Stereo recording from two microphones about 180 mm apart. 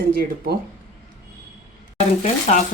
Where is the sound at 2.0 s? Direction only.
45° left (ahead or behind).